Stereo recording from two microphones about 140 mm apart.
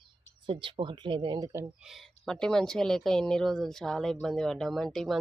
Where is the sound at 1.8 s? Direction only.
Centre (ahead or behind).